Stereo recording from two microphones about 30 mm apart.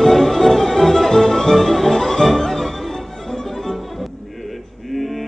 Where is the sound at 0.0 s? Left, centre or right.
Centre.